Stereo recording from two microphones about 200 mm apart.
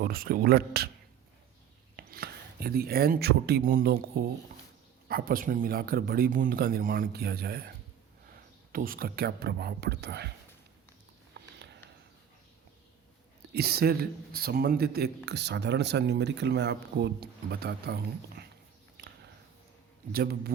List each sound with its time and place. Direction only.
0.0 s speech: 45° right (ahead or behind)
2.0 s speech: 50° right (ahead or behind)
8.7 s speech: 45° right (ahead or behind)
11.3 s a sound: 55° right (ahead or behind)
13.5 s speech: 50° right (ahead or behind)
18.9 s a sound: 55° right (ahead or behind)
20.1 s speech: 50° right (ahead or behind)